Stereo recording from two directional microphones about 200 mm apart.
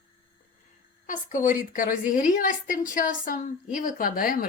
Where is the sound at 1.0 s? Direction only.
40° left (ahead or behind).